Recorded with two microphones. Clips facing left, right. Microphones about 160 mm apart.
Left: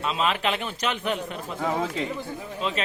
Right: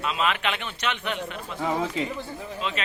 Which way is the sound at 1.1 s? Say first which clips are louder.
Left 2 dB; centre (ahead or behind).